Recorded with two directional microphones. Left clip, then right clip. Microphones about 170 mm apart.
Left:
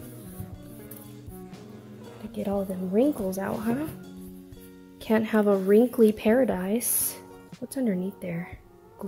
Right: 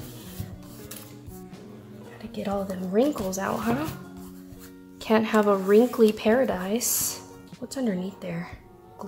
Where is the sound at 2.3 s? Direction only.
45° left (ahead or behind).